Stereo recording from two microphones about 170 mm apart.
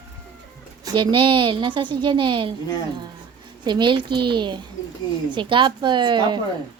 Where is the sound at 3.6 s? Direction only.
25° right (ahead or behind).